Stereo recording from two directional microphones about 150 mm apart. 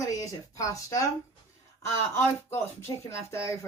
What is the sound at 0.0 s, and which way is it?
Speech, 25° left (ahead or behind).